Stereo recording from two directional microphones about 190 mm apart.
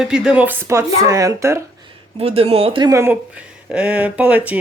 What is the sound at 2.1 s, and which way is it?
Speech, 30° right (ahead or behind).